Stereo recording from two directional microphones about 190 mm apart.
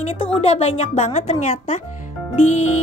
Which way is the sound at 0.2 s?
30° left (ahead or behind).